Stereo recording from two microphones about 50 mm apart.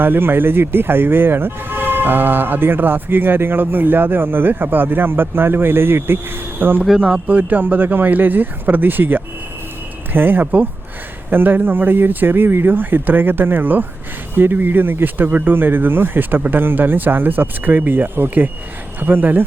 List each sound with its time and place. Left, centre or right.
0.0 s speech: right
7.0 s speech: right